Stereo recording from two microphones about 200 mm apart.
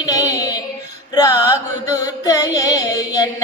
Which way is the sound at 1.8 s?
15° left (ahead or behind).